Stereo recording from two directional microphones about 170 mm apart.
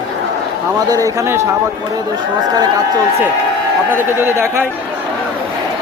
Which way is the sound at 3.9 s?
15° right (ahead or behind).